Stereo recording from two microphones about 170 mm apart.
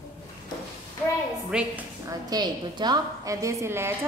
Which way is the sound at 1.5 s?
5° right (ahead or behind).